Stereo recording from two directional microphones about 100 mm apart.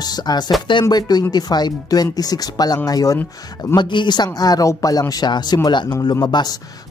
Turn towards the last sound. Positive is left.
turn(degrees=40)  # may be behind; listen again after turning